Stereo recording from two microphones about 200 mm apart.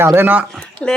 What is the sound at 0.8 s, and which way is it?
Speech, 5° left (ahead or behind).